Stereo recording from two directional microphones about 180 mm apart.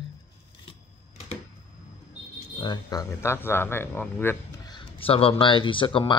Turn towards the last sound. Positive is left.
turn(degrees=30)  # may be behind; listen again after turning